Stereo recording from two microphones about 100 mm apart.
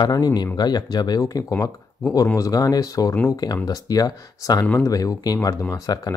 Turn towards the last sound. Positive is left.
turn(degrees=35)  # may be behind; listen again after turning